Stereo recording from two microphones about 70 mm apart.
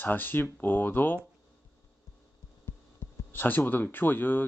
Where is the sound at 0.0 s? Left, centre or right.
Left.